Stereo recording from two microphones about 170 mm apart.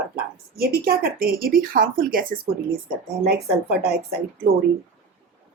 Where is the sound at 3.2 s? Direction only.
70° right (ahead or behind).